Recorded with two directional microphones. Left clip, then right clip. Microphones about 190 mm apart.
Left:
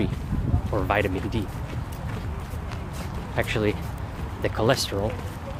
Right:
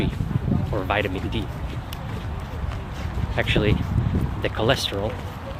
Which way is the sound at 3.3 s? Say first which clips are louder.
Right 3 dB; 10° left (ahead or behind).